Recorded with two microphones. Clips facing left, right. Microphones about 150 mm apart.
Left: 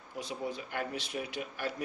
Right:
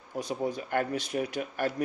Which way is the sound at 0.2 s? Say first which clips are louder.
Right 6 dB; 40° right (ahead or behind).